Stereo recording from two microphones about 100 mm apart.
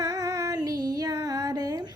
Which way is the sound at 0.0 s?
35° right (ahead or behind).